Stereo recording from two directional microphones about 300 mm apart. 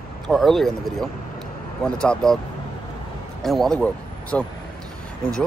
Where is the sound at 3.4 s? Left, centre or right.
Centre.